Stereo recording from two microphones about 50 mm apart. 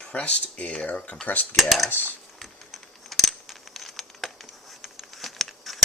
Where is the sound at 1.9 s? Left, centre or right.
Left.